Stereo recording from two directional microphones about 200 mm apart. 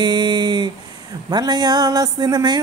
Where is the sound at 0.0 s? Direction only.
20° right (ahead or behind).